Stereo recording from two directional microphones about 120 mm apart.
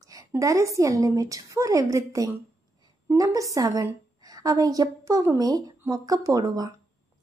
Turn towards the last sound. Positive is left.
turn(degrees=-30)  # may be behind; listen again after turning